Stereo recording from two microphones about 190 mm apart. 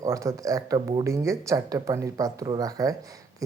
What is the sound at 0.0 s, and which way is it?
Speech, 15° right (ahead or behind).